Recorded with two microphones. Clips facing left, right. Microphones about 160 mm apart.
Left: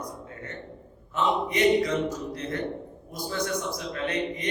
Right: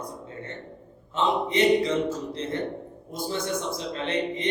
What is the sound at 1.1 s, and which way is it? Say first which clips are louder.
A man's voice: right 2 dB; 25° right (ahead or behind).